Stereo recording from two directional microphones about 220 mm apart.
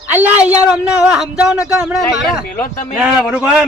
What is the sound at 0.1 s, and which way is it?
A man's voice, 10° right (ahead or behind).